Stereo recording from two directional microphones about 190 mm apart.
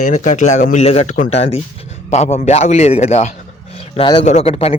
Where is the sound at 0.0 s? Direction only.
40° left (ahead or behind).